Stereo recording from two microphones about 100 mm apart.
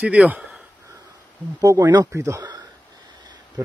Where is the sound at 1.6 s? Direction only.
40° right (ahead or behind).